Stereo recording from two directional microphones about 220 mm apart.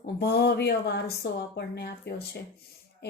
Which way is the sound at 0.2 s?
45° left (ahead or behind).